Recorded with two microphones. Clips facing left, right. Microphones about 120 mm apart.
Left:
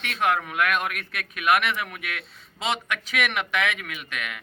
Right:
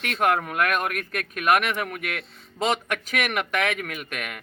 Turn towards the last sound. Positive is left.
turn(degrees=-50)  # may be behind; listen again after turning